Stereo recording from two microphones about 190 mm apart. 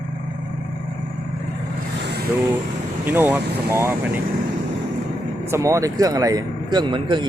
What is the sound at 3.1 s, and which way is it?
Speech, 10° right (ahead or behind).